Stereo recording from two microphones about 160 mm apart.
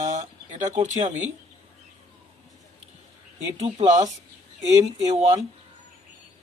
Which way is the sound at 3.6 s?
45° right (ahead or behind).